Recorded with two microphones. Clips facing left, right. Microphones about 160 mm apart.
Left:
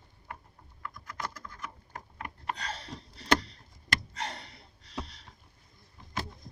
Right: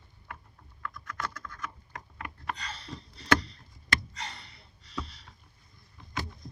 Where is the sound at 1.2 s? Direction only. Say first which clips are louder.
Right 1 dB; 25° left (ahead or behind).